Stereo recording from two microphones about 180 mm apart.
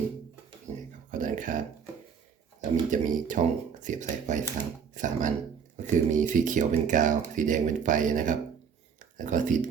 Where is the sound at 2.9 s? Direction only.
45° right (ahead or behind).